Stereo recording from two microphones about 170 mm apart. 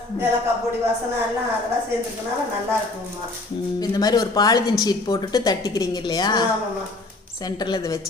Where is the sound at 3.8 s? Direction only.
25° left (ahead or behind).